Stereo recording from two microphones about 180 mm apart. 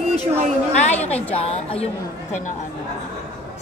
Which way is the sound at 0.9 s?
35° left (ahead or behind).